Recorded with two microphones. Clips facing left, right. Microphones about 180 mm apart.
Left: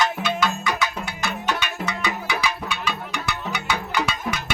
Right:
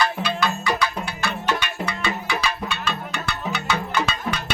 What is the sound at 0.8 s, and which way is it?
Music, 15° left (ahead or behind).